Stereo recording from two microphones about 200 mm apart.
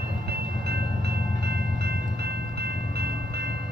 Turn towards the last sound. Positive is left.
turn(degrees=-55)  # may be behind; listen again after turning